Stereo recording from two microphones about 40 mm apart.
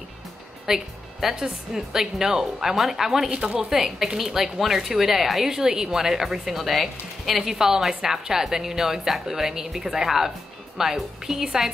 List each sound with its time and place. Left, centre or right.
0.7 s a woman's voice: centre
3.3 s speech: right
3.7 s a woman's voice: centre